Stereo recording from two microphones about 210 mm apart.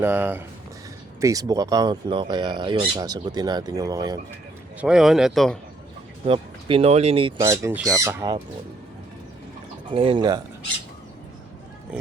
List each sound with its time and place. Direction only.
0.0 s speech: 10° right (ahead or behind)
4.8 s speech: 5° right (ahead or behind)
6.2 s speech: 25° right (ahead or behind)
9.9 s speech: 25° right (ahead or behind)